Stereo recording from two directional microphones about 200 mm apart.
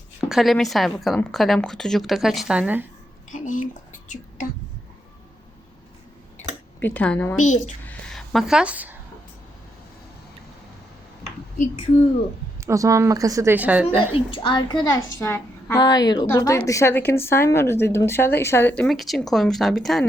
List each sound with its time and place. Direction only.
0.3 s speech: centre (ahead or behind)
3.3 s speech: 40° left (ahead or behind)
6.7 s a woman's voice: 5° left (ahead or behind)
11.5 s speech: 40° left (ahead or behind)
12.5 s speech: 15° right (ahead or behind)
14.3 s a woman's voice: 25° left (ahead or behind); by 20.1 s centre (ahead or behind)